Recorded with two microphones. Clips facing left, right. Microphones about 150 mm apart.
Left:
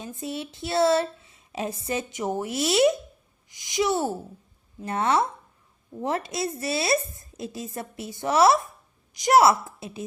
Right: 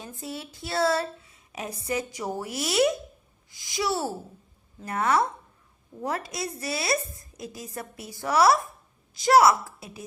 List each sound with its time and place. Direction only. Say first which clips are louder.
0.0 s speech: left 4 dB; 20° left (ahead or behind)